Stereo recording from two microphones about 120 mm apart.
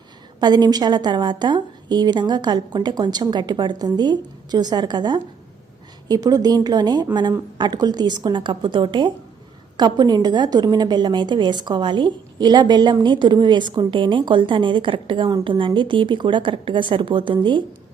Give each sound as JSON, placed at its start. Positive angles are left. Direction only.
{"t": 0.3, "sound": "a woman's voice", "side_deg": -35}